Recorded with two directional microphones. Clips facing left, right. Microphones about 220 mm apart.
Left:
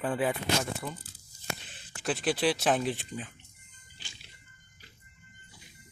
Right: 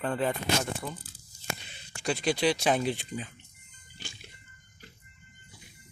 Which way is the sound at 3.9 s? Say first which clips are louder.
Right 8 dB; 45° right (ahead or behind).